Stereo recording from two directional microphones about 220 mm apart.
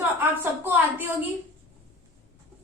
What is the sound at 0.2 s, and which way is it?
Speech, 10° right (ahead or behind).